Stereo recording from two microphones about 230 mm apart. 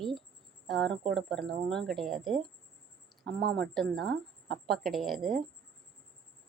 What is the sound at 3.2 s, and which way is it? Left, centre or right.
Speech, right.